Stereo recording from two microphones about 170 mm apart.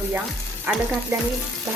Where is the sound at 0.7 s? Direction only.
10° right (ahead or behind).